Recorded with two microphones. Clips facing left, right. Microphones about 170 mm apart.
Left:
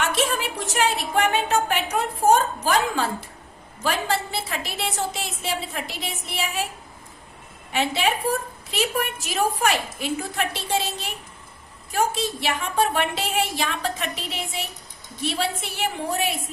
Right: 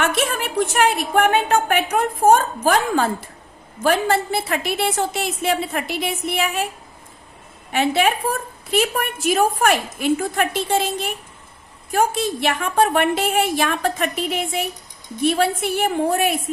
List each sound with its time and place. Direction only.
0.0 s a woman's voice: 55° right (ahead or behind)
7.7 s a woman's voice: 55° right (ahead or behind)